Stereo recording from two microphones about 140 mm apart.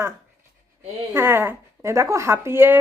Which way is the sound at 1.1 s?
15° right (ahead or behind).